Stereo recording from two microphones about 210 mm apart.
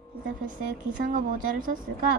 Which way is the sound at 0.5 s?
40° right (ahead or behind).